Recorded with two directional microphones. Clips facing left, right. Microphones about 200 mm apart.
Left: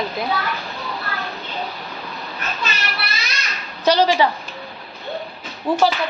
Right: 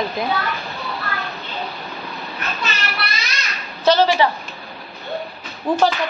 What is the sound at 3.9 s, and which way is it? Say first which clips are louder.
Speech: right 1 dB; 15° left (ahead or behind).